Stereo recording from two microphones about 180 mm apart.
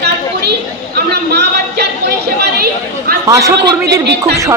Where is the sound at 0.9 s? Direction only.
65° right (ahead or behind).